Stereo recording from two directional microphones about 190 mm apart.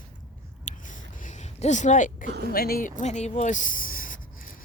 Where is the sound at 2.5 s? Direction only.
50° left (ahead or behind).